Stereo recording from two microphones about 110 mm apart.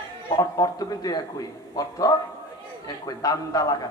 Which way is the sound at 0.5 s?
35° left (ahead or behind).